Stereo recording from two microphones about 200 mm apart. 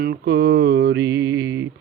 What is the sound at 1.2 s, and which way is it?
Mantra, 15° right (ahead or behind).